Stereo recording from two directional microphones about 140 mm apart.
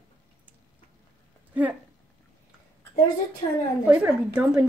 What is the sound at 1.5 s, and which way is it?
Speech, 10° right (ahead or behind).